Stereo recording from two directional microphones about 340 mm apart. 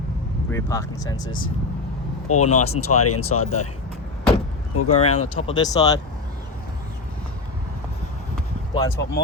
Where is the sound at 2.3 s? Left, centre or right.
Left.